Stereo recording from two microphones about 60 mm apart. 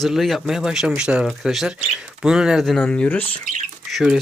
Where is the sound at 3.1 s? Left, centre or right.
Left.